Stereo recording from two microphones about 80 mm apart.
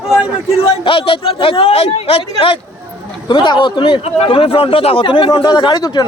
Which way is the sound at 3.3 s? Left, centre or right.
Left.